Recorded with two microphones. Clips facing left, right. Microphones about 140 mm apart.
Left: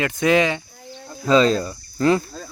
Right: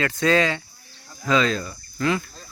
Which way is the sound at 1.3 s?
35° left (ahead or behind).